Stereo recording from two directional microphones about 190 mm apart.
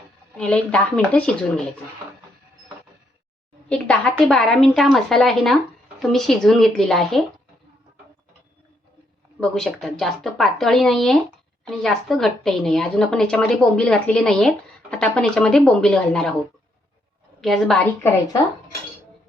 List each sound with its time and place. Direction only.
0.3 s a woman's voice: 5° left (ahead or behind)
3.7 s a woman's voice: 5° left (ahead or behind)
9.4 s a woman's voice: centre (ahead or behind)
17.4 s a woman's voice: centre (ahead or behind)